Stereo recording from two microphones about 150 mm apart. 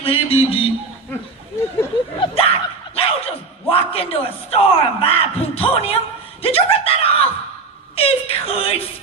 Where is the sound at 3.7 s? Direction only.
40° left (ahead or behind).